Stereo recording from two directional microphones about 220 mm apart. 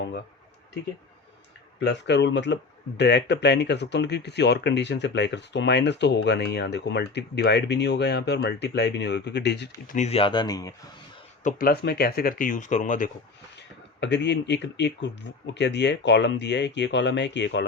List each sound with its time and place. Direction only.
1.8 s speech: 50° left (ahead or behind)
9.9 s speech: 30° left (ahead or behind)
11.4 s speech: 40° left (ahead or behind)
13.6 s speech: 50° left (ahead or behind)